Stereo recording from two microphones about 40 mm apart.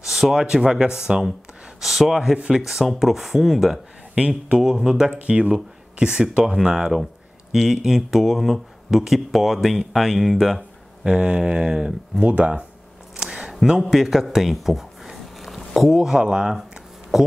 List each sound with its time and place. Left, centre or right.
0.0 s speech: centre
1.8 s speech: centre
2.3 s speech: right
2.6 s speech: centre
5.2 s speech: right
5.5 s speech: centre
11.1 s speech: right
13.1 s a sound: right
13.9 s a sound: centre
16.0 s speech: centre
17.1 s speech: centre